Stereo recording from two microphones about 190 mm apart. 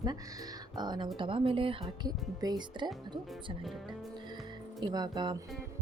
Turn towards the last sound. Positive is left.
turn(degrees=-20)  # may be behind; listen again after turning